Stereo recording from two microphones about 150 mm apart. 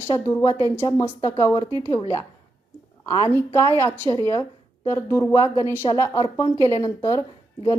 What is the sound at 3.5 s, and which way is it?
A woman's voice, 15° left (ahead or behind).